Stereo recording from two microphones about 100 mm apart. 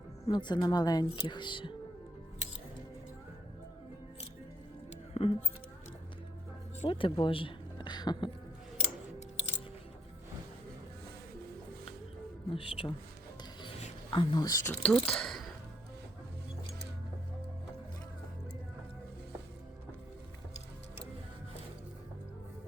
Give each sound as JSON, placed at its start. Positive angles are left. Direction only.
{"t": 0.3, "sound": "speech", "side_deg": 50}
{"t": 5.1, "sound": "speech", "side_deg": 90}
{"t": 6.8, "sound": "speech", "side_deg": 65}
{"t": 12.5, "sound": "speech", "side_deg": 60}
{"t": 14.1, "sound": "speech", "side_deg": 50}
{"t": 14.7, "sound": "speech", "side_deg": 15}